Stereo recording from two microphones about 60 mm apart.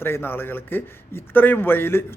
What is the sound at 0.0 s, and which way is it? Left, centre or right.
Speech, left.